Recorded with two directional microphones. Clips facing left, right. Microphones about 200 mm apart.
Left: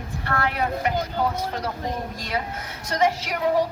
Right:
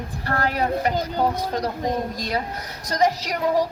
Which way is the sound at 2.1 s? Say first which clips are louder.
Right 2 dB; 40° right (ahead or behind).